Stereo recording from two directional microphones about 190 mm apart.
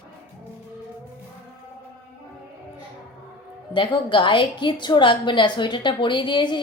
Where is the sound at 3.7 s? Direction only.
25° left (ahead or behind).